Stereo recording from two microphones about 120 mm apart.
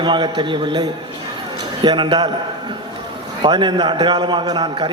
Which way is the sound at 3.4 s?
40° right (ahead or behind).